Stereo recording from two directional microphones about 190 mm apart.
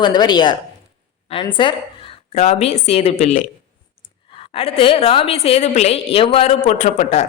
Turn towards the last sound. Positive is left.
turn(degrees=35)  # may be behind; listen again after turning